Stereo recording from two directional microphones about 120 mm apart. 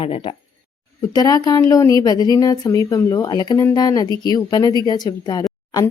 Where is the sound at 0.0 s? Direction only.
50° left (ahead or behind).